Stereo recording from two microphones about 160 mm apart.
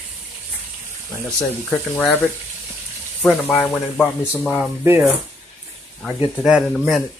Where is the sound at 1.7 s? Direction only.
10° left (ahead or behind).